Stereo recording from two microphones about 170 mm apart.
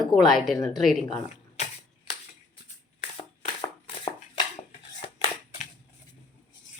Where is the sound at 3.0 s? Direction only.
35° left (ahead or behind).